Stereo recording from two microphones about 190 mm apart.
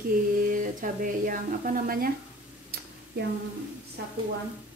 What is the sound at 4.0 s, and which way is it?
Speech, 60° right (ahead or behind).